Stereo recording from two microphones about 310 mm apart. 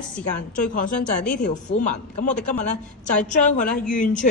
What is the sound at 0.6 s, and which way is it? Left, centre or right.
A woman's voice, left.